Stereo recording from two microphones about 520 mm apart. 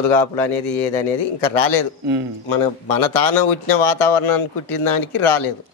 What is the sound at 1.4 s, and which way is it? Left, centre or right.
A man's voice, left.